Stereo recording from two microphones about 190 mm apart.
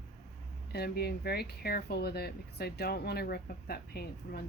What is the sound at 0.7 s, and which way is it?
Speech, 55° left (ahead or behind).